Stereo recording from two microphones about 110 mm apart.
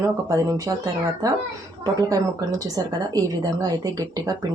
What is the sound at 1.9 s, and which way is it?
Speech, 35° right (ahead or behind).